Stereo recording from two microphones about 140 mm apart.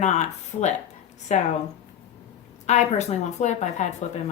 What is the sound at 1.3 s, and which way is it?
Speech, 60° left (ahead or behind).